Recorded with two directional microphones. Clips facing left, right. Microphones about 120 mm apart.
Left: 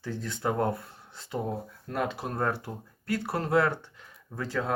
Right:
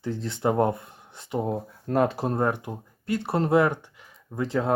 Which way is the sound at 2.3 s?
15° right (ahead or behind).